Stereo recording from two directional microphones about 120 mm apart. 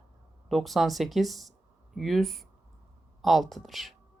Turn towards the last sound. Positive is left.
turn(degrees=0)  # may be behind; listen again after turning